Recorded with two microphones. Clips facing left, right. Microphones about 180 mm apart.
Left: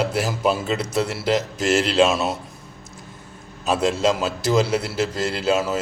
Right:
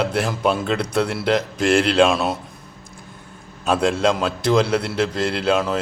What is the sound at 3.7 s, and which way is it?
A man's voice, centre (ahead or behind).